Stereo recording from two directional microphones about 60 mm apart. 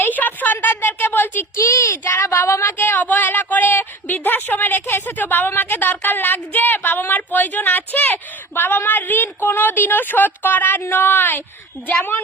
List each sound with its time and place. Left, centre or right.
0.0 s a sound: left
1.5 s a child's voice: left
2.1 s a woman's voice: left